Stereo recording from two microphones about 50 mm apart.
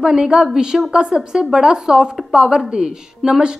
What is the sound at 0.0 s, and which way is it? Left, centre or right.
Speech, centre.